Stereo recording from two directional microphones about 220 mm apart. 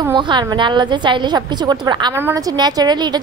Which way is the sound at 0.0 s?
20° right (ahead or behind).